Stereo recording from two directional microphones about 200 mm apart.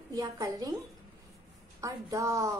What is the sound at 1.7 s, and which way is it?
Speech, 15° right (ahead or behind).